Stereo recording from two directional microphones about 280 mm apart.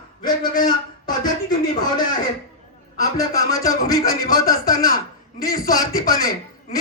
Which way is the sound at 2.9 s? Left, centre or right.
Centre.